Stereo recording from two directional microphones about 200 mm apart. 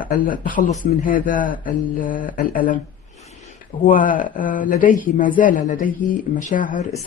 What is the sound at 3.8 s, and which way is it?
Speech, 45° left (ahead or behind).